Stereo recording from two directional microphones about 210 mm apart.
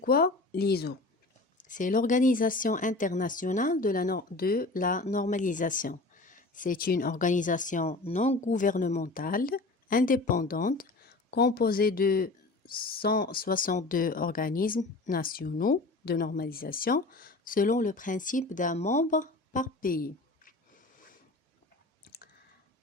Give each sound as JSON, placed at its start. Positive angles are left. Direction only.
{"t": 0.0, "sound": "speech", "side_deg": 45}
{"t": 1.5, "sound": "speech", "side_deg": 40}
{"t": 22.0, "sound": "clicking", "side_deg": 50}